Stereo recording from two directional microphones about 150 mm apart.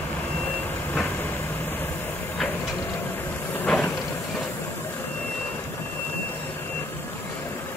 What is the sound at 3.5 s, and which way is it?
Vehicle, 10° left (ahead or behind).